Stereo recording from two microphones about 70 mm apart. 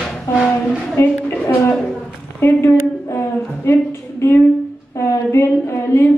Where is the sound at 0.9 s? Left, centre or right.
Left.